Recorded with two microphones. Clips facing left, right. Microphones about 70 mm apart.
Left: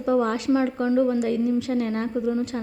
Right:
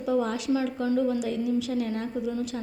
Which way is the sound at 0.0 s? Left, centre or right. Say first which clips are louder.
Left 4 dB; left.